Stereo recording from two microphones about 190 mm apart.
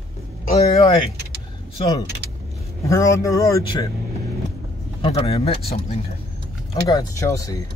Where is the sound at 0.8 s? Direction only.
20° left (ahead or behind).